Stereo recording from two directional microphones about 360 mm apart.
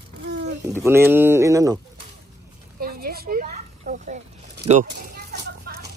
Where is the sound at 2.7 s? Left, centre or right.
Right.